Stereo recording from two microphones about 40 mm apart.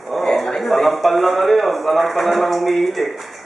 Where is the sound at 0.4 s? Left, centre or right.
Centre.